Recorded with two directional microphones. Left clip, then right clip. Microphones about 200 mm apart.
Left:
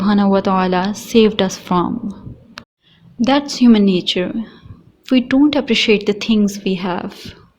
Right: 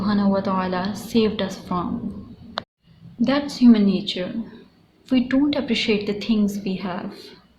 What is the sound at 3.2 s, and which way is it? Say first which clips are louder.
A woman's voice: left 5 dB; 45° left (ahead or behind).